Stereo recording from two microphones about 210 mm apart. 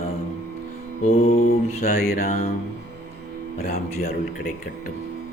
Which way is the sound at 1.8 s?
45° left (ahead or behind).